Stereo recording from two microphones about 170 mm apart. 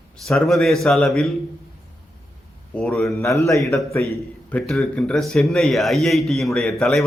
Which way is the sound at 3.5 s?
Centre (ahead or behind).